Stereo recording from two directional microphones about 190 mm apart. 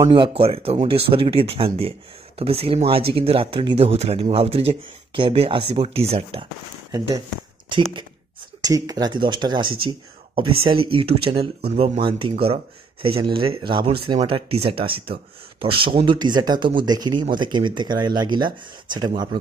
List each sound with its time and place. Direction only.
0.0 s speech: 20° right (ahead or behind)
6.9 s speech: 15° right (ahead or behind)
8.5 s speech: 20° right (ahead or behind)